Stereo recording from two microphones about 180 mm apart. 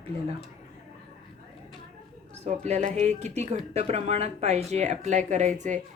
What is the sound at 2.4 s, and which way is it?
Speech, 40° right (ahead or behind).